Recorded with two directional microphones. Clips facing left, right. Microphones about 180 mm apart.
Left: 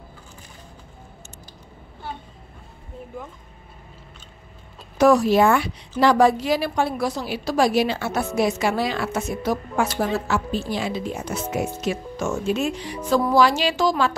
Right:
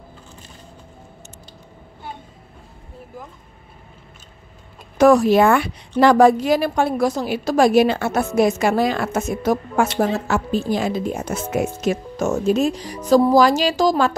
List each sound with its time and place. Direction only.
4.9 s a woman's voice: 50° right (ahead or behind)